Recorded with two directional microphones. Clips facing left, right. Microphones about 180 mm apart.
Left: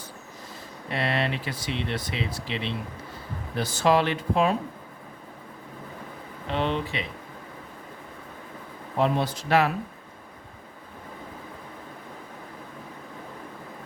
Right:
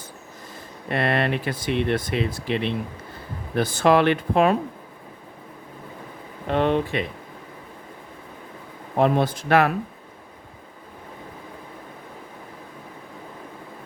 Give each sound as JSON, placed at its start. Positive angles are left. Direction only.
{"t": 0.9, "sound": "speech", "side_deg": -55}
{"t": 6.5, "sound": "speech", "side_deg": -50}
{"t": 9.0, "sound": "speech", "side_deg": -55}